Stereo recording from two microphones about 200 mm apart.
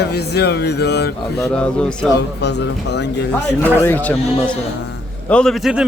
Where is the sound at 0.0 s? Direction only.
55° left (ahead or behind).